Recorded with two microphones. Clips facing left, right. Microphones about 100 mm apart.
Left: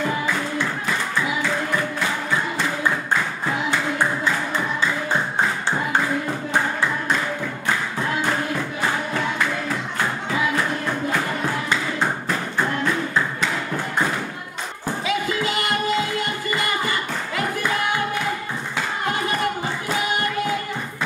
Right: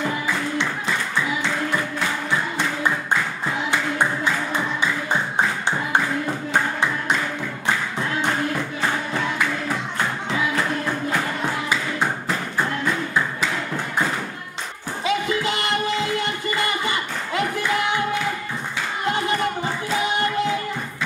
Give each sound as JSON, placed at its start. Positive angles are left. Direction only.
{"t": 15.0, "sound": "music", "side_deg": -25}
{"t": 16.8, "sound": "clapping", "side_deg": -25}